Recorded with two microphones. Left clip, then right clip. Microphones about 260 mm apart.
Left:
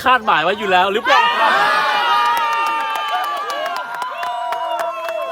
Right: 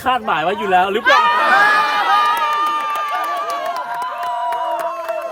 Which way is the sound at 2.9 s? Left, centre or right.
Centre.